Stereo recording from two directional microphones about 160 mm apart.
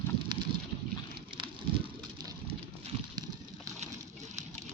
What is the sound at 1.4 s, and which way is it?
Rain, 25° right (ahead or behind).